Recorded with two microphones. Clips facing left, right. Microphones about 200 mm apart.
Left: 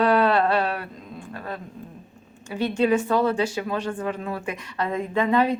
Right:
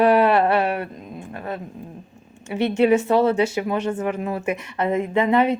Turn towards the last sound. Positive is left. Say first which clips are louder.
# right 3 dB
turn(degrees=-25)  # may be behind; listen again after turning